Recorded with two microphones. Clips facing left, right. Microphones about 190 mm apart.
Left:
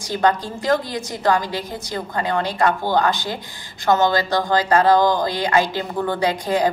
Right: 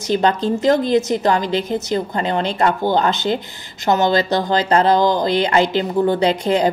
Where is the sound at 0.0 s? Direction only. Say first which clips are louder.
Right 3 dB; 20° right (ahead or behind).